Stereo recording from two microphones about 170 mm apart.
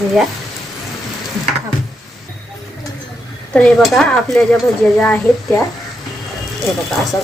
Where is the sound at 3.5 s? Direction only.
5° left (ahead or behind).